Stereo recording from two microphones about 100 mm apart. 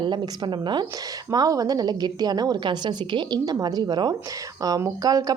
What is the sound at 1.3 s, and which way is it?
A woman's voice, 40° right (ahead or behind).